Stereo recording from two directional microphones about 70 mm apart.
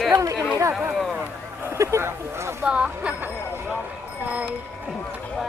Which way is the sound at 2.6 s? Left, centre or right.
Centre.